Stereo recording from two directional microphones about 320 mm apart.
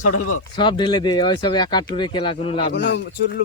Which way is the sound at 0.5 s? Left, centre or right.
Centre.